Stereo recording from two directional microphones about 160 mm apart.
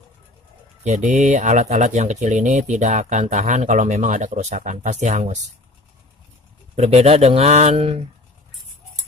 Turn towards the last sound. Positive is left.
turn(degrees=-40)  # may be behind; listen again after turning